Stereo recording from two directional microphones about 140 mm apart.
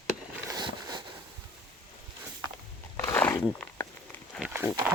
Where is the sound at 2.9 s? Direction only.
15° left (ahead or behind).